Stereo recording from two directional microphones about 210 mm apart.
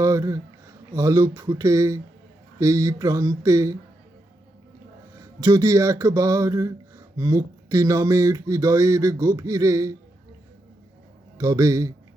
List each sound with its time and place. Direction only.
0.0 s speech: 15° right (ahead or behind)
5.4 s speech: 15° right (ahead or behind)
11.3 s speech: 15° right (ahead or behind)